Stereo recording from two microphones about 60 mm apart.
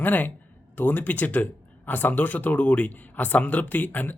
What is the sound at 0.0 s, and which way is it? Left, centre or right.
A man's voice, left.